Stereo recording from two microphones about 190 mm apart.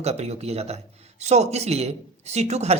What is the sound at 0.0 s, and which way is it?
Speech, 35° right (ahead or behind).